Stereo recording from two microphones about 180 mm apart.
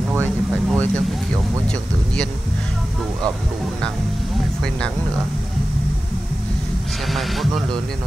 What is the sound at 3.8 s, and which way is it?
Speech, 5° left (ahead or behind).